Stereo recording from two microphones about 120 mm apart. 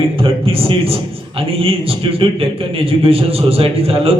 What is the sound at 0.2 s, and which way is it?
A man's voice, 50° right (ahead or behind).